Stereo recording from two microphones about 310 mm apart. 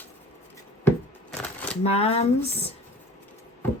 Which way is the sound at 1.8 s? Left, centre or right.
Centre.